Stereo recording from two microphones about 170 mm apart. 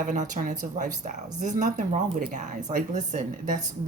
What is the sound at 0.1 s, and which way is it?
Speech, 45° right (ahead or behind).